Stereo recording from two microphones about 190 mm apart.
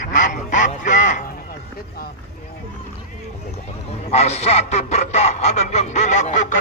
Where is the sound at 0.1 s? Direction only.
40° left (ahead or behind).